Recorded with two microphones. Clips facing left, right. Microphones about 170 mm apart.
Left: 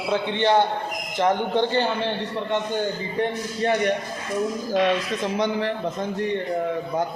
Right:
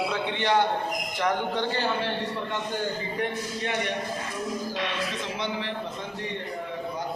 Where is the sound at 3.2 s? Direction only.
35° left (ahead or behind).